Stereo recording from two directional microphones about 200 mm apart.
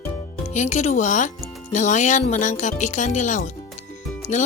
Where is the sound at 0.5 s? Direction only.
35° left (ahead or behind).